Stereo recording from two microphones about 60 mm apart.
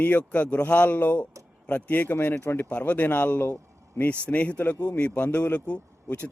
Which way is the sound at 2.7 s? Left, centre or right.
Left.